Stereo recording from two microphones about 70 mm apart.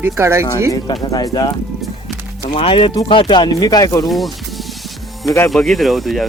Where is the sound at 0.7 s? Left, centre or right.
Left.